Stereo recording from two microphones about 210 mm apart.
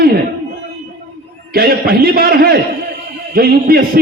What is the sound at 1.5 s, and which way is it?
A man's voice, 45° right (ahead or behind).